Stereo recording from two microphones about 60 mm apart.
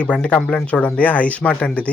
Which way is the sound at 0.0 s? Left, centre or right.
Left.